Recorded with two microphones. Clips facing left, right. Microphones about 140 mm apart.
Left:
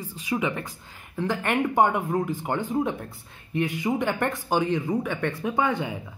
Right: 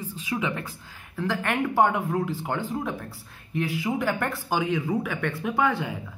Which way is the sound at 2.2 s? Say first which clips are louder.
Left 2 dB; 15° left (ahead or behind).